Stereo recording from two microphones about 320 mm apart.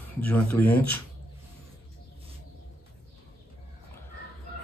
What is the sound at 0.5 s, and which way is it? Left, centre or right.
Speech, left.